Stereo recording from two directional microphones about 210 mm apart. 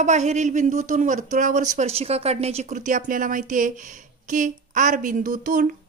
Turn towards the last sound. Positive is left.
turn(degrees=-40)  # may be behind; listen again after turning